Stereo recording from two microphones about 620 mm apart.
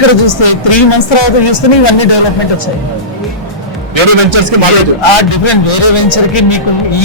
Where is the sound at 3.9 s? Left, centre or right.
Right.